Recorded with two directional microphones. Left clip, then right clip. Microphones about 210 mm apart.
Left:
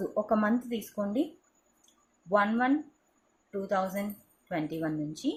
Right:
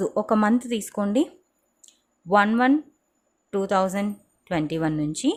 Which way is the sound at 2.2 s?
55° right (ahead or behind).